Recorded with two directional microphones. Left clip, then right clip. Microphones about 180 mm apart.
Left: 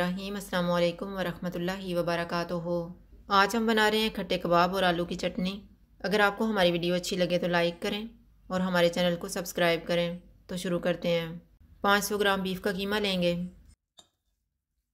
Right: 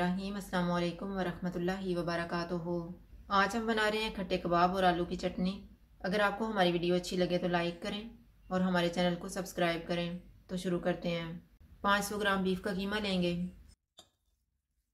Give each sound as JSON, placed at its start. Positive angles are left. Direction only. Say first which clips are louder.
{"t": 0.0, "sound": "speech", "louder": "left 4 dB", "side_deg": 45}